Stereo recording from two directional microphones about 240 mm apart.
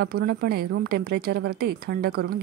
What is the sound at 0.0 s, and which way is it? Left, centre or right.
A woman's voice, right.